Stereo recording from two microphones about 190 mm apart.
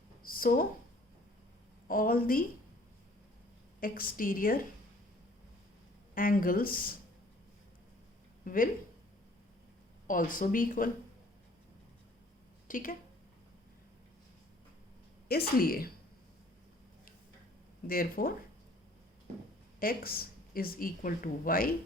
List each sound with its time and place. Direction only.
0.3 s a sound: 50° left (ahead or behind)
1.9 s speech: 50° left (ahead or behind)
3.8 s speech: 50° left (ahead or behind)
6.1 s speech: 50° left (ahead or behind)
8.4 s speech: 45° left (ahead or behind)
10.1 s speech: 45° left (ahead or behind)
12.6 s speech: 45° left (ahead or behind)
15.3 s speech: 55° left (ahead or behind)
17.8 s speech: 50° left (ahead or behind)
19.8 s speech: 50° left (ahead or behind)